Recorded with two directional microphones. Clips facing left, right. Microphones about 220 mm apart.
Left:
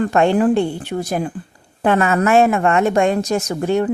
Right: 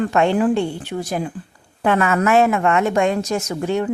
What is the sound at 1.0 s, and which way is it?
Speech, 50° left (ahead or behind).